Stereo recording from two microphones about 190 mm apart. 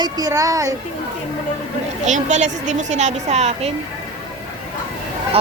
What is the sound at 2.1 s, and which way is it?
Speech, 40° right (ahead or behind).